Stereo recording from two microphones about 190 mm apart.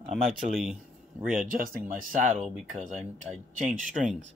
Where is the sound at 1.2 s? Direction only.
45° right (ahead or behind).